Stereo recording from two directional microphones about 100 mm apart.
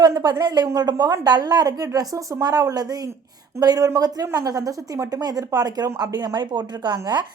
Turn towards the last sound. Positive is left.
turn(degrees=-45)  # may be behind; listen again after turning